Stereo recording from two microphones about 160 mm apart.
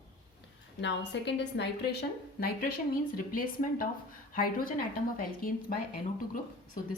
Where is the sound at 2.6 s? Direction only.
60° left (ahead or behind).